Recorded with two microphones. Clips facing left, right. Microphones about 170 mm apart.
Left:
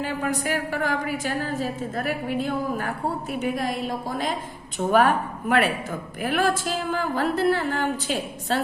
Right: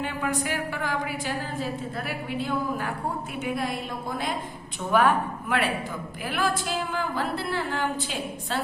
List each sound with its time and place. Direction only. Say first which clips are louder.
0.0 s a woman's voice: left 2 dB; 40° left (ahead or behind)